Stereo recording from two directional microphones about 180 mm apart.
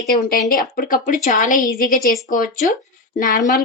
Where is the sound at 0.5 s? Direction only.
50° left (ahead or behind).